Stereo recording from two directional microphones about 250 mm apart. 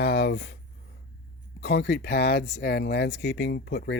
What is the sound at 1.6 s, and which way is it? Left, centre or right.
Speech, left.